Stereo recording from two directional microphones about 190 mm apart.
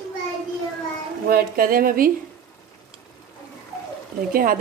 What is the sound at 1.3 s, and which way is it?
Speech, 50° right (ahead or behind).